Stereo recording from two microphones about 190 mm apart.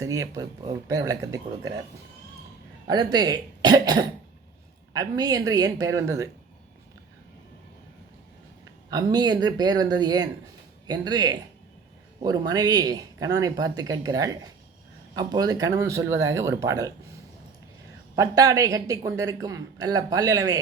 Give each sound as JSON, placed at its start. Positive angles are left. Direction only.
{"t": 0.0, "sound": "speech", "side_deg": -15}
{"t": 2.8, "sound": "speech", "side_deg": -20}
{"t": 8.9, "sound": "speech", "side_deg": -20}
{"t": 18.2, "sound": "speech", "side_deg": -20}